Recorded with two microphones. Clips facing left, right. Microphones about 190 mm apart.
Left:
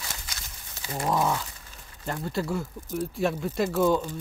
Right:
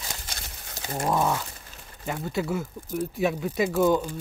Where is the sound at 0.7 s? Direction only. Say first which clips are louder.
Right 2 dB; 45° right (ahead or behind).